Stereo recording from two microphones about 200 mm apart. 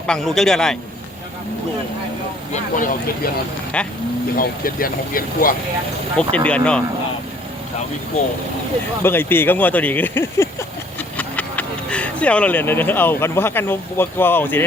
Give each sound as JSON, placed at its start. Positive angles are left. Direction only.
{"t": 0.1, "sound": "a man's voice", "side_deg": 0}
{"t": 2.5, "sound": "speech", "side_deg": 40}
{"t": 3.7, "sound": "a man's voice", "side_deg": 5}
{"t": 4.4, "sound": "speech", "side_deg": 45}
{"t": 6.3, "sound": "a man's voice", "side_deg": 5}
{"t": 9.0, "sound": "speech", "side_deg": 10}